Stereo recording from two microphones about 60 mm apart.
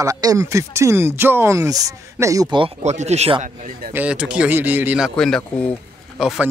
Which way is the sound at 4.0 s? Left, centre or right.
Centre.